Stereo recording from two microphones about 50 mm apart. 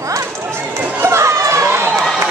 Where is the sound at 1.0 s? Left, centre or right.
Right.